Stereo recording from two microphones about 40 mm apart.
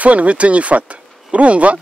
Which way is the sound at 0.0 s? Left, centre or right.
Right.